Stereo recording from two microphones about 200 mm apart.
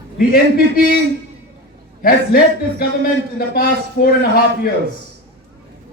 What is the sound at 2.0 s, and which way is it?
A man's voice, 45° left (ahead or behind).